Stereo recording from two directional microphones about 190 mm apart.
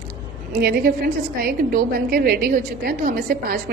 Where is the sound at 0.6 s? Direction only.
55° right (ahead or behind).